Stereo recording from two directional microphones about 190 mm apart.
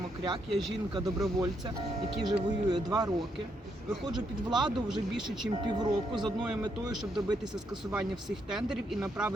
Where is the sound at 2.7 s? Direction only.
20° right (ahead or behind).